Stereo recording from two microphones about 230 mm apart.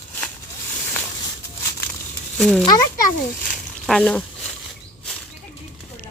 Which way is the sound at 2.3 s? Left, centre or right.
Centre.